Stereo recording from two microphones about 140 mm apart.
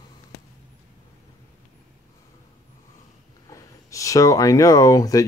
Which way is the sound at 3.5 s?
25° left (ahead or behind).